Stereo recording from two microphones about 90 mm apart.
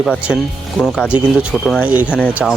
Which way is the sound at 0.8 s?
5° left (ahead or behind).